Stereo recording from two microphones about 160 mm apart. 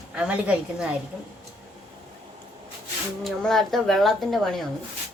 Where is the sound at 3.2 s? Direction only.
Centre (ahead or behind).